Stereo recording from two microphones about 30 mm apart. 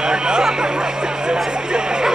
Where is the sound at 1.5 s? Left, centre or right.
Right.